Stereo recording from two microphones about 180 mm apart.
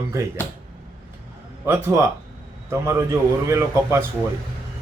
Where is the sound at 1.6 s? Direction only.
15° right (ahead or behind).